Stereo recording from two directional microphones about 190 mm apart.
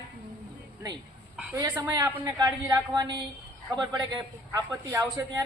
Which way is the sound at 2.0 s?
15° right (ahead or behind).